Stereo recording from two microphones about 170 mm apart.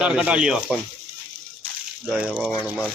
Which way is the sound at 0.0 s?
5° right (ahead or behind).